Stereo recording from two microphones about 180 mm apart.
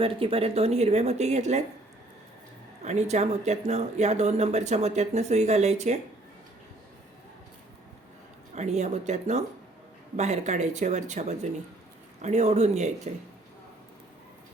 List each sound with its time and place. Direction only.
0.0 s speech: 30° right (ahead or behind)
2.8 s speech: 40° right (ahead or behind)
8.5 s speech: 40° right (ahead or behind)